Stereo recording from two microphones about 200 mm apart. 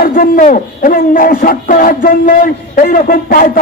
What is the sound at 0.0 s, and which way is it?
Speech, 45° left (ahead or behind).